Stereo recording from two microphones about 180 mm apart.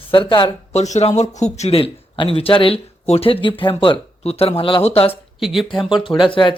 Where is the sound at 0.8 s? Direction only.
40° left (ahead or behind).